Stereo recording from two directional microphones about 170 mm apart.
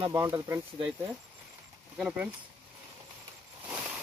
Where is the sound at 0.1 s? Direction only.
15° right (ahead or behind).